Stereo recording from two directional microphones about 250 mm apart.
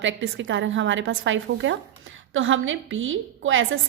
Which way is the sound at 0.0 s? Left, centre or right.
Right.